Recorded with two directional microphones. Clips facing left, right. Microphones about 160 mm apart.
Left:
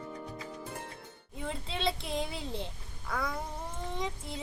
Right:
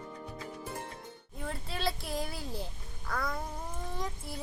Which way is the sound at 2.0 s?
25° left (ahead or behind).